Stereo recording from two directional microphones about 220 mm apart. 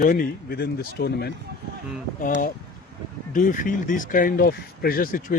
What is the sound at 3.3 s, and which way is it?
Speech, 35° left (ahead or behind).